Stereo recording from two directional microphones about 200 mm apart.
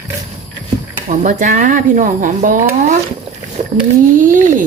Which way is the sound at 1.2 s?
40° right (ahead or behind).